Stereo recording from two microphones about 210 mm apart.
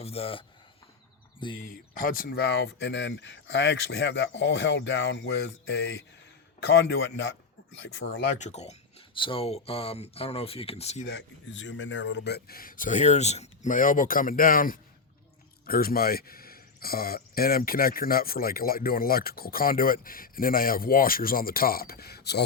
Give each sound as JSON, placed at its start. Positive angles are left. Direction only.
{"t": 0.0, "sound": "speech", "side_deg": 30}
{"t": 1.6, "sound": "speech", "side_deg": 40}
{"t": 6.8, "sound": "speech", "side_deg": 55}
{"t": 8.4, "sound": "speech", "side_deg": 30}
{"t": 11.0, "sound": "speech", "side_deg": 60}